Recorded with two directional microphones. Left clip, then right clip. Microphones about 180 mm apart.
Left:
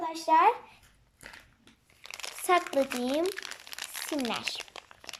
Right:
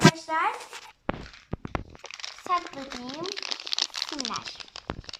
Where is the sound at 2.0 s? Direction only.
25° left (ahead or behind).